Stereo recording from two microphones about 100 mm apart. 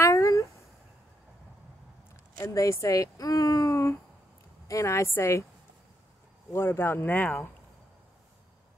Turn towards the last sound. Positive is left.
turn(degrees=20)  # may be behind; listen again after turning